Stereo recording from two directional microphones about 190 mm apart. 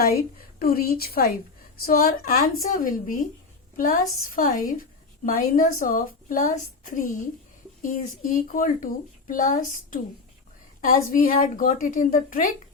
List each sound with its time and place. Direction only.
0.0 s a woman's voice: 55° left (ahead or behind)